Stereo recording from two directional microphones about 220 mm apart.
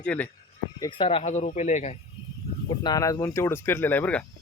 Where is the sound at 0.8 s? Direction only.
20° left (ahead or behind).